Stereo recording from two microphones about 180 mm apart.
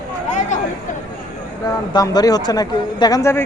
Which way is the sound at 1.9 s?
20° left (ahead or behind).